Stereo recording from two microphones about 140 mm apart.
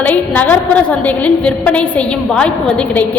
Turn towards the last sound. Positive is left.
turn(degrees=10)  # may be behind; listen again after turning